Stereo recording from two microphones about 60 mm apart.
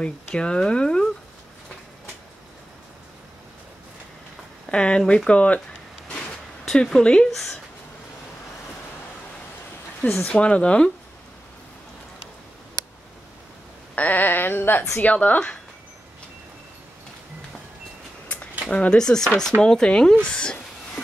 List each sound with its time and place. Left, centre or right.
0.0 s speech: centre
4.6 s speech: centre
6.6 s speech: centre
10.2 s speech: left
13.9 s speech: left
18.7 s speech: centre